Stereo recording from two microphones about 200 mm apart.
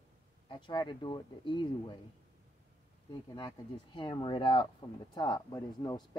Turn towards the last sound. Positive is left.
turn(degrees=20)  # may be behind; listen again after turning